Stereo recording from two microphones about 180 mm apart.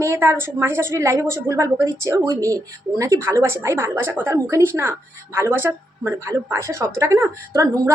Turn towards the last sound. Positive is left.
turn(degrees=-15)  # may be behind; listen again after turning